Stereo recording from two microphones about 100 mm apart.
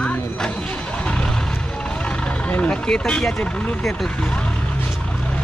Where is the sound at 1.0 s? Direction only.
10° left (ahead or behind).